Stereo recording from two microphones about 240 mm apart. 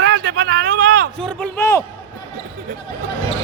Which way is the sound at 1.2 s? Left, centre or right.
Centre.